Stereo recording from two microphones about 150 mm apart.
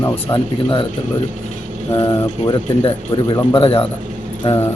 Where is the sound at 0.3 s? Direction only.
35° left (ahead or behind).